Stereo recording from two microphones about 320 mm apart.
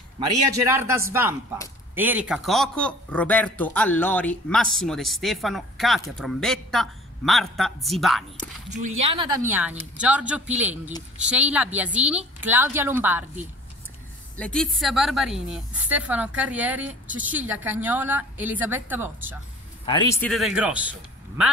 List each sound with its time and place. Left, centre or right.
0.2 s speech: centre
8.6 s speech: right
9.5 s speech: centre
14.3 s speech: centre
19.9 s speech: centre